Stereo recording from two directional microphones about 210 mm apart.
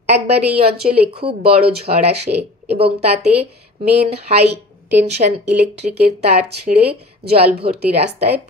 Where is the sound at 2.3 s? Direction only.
40° right (ahead or behind).